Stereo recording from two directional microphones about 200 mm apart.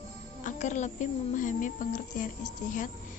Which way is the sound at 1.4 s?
40° left (ahead or behind).